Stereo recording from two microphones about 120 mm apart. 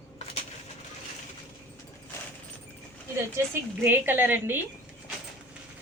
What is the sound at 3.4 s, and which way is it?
A woman's voice, 25° right (ahead or behind).